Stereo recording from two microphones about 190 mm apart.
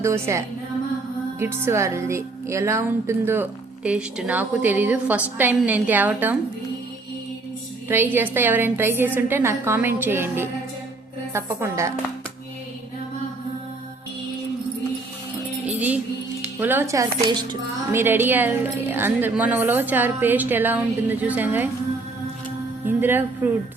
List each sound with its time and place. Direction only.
0.0 s a woman's voice: 15° right (ahead or behind)
7.9 s a woman's voice: 10° right (ahead or behind)
16.6 s a woman's voice: 10° right (ahead or behind)
17.2 s music: 25° right (ahead or behind)
17.9 s a woman's voice: 10° right (ahead or behind)
22.9 s speech: 10° right (ahead or behind)